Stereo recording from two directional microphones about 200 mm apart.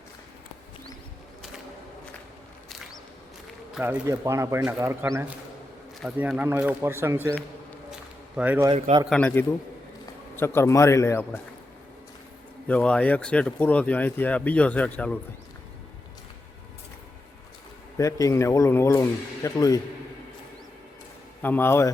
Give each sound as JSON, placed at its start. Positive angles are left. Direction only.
{"t": 3.8, "sound": "speech", "side_deg": -10}
{"t": 8.4, "sound": "speech", "side_deg": -10}
{"t": 8.7, "sound": "speech", "side_deg": -25}
{"t": 9.0, "sound": "speech", "side_deg": 5}
{"t": 12.6, "sound": "speech", "side_deg": 5}
{"t": 17.9, "sound": "speech", "side_deg": 15}
{"t": 21.4, "sound": "speech", "side_deg": 10}